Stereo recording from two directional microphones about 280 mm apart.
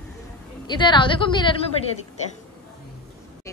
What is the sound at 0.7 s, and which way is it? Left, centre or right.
Speech, centre.